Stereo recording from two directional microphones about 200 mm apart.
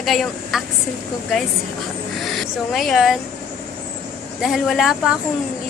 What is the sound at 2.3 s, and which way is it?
Speech, centre (ahead or behind).